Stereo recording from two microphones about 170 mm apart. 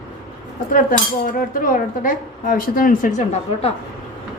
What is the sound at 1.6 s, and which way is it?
A woman's voice, 55° left (ahead or behind).